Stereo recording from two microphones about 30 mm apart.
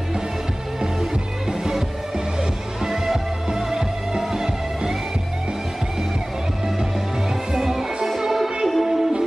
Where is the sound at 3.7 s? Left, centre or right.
Centre.